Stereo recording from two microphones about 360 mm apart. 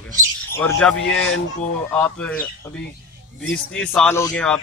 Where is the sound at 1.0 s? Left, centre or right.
Left.